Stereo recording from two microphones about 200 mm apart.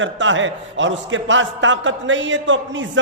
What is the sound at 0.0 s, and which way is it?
A man's voice, 70° right (ahead or behind).